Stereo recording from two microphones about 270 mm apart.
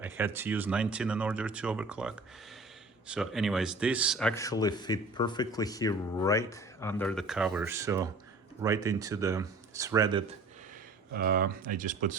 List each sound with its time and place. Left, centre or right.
0.0 s speech: centre
11.1 s speech: right